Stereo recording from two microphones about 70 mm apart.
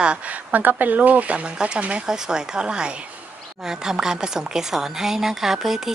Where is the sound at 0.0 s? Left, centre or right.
Centre.